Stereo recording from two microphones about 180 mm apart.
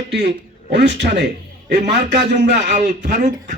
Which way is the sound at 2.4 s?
70° right (ahead or behind).